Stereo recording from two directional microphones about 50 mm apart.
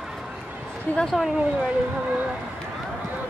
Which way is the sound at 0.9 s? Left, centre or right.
Left.